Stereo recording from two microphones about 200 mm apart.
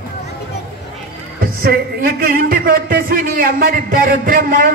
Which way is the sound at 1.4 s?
50° right (ahead or behind).